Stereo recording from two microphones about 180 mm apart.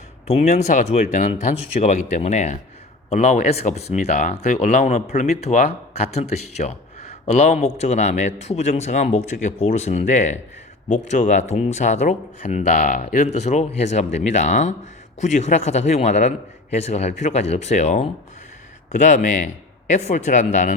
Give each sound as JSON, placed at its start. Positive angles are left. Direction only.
{"t": 0.3, "sound": "speech", "side_deg": 35}